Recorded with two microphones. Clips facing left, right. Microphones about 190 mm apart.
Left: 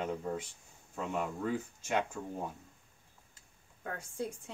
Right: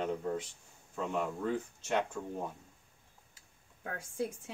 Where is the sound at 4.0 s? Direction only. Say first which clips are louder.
Right 4 dB; 10° right (ahead or behind).